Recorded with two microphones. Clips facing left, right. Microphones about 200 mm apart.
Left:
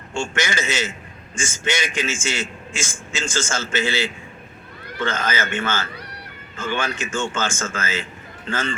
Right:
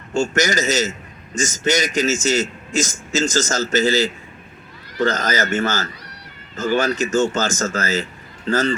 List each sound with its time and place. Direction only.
0.1 s a man's voice: 40° right (ahead or behind)